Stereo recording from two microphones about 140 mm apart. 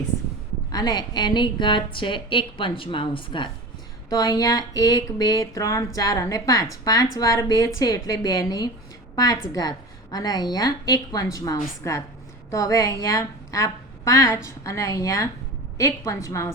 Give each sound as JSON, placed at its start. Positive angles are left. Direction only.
{"t": 0.7, "sound": "a woman's voice", "side_deg": 30}
{"t": 4.1, "sound": "speech", "side_deg": 25}